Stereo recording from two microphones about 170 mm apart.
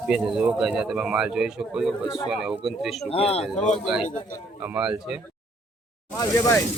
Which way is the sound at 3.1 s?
35° left (ahead or behind).